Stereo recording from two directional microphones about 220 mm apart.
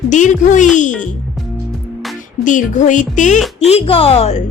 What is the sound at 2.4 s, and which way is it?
A woman's voice, 35° left (ahead or behind).